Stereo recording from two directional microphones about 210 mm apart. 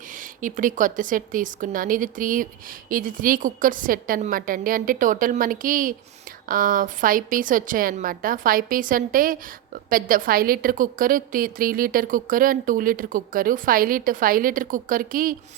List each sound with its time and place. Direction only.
0.2 s a woman's voice: 40° right (ahead or behind)